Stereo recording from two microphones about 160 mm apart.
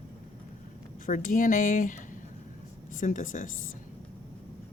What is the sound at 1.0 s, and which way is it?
Speech, 60° left (ahead or behind).